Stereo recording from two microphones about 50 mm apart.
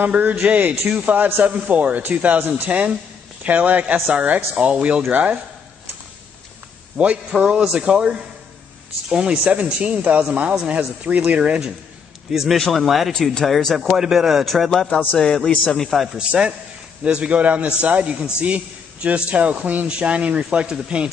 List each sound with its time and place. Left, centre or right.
0.1 s a man's voice: right
7.0 s a man's voice: right
12.3 s a man's voice: centre
13.1 s speech: centre
13.8 s a man's voice: centre
16.2 s a man's voice: centre